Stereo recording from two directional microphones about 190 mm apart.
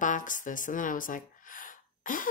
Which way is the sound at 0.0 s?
40° left (ahead or behind).